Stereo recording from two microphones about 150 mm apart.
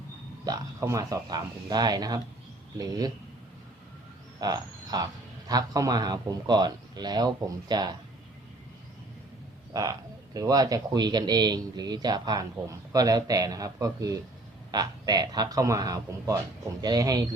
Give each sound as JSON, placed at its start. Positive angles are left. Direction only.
{"t": 0.4, "sound": "speech", "side_deg": -20}
{"t": 4.4, "sound": "speech", "side_deg": -25}
{"t": 9.7, "sound": "speech", "side_deg": -25}